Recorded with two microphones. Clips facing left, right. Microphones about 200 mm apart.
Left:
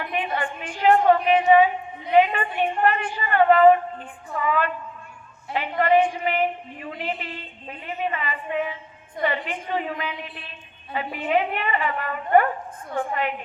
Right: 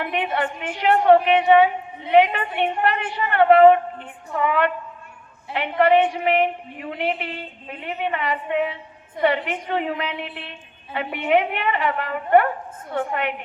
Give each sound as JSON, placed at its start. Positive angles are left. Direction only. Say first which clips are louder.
{"t": 0.0, "sound": "a woman's voice", "louder": "right 3 dB", "side_deg": -65}